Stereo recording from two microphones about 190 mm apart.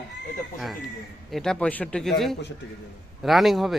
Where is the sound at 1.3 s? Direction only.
5° left (ahead or behind).